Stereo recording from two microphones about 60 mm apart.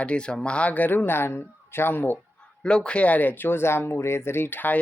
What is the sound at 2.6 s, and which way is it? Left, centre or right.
Speech, centre.